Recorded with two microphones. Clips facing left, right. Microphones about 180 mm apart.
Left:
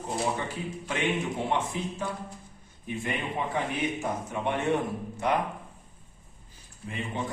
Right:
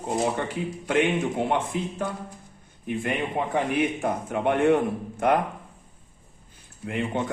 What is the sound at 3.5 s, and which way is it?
Speech, 60° right (ahead or behind).